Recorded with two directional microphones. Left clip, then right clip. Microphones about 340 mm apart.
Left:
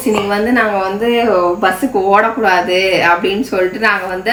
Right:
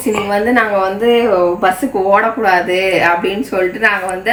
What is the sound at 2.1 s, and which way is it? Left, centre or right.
Speech, centre.